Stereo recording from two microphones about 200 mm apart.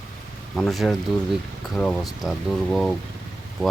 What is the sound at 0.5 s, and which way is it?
Speech, centre (ahead or behind).